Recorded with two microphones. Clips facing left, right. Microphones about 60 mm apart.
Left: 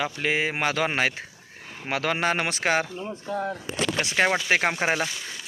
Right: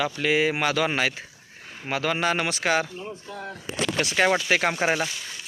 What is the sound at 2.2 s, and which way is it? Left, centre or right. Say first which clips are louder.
Speech: even; left.